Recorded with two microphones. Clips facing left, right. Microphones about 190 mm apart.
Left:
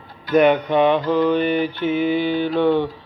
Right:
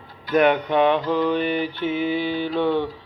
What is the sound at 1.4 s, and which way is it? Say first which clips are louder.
Mantra: left 4 dB; 50° left (ahead or behind).